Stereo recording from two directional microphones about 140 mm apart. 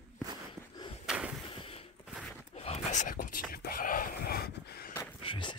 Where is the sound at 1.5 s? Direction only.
40° left (ahead or behind).